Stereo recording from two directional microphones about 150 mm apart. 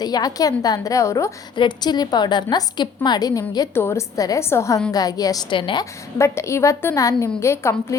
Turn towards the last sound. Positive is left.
turn(degrees=20)  # may be behind; listen again after turning